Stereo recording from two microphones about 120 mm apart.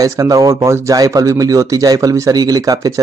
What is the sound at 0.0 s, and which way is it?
Speech, 25° right (ahead or behind).